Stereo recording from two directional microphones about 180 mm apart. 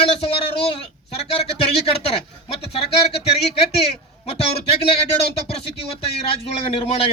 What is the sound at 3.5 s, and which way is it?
A man's voice, 35° left (ahead or behind).